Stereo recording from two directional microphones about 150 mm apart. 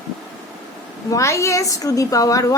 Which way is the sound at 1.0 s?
20° left (ahead or behind).